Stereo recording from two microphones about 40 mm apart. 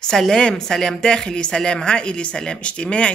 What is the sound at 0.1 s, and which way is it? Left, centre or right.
Speech, centre.